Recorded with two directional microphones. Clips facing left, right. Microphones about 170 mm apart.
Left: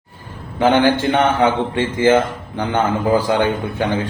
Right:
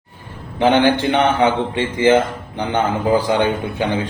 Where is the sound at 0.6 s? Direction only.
20° right (ahead or behind).